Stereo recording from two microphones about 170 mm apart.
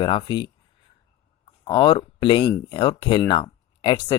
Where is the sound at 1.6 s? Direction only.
30° left (ahead or behind).